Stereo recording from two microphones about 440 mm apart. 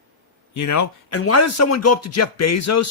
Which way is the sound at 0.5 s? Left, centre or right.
Left.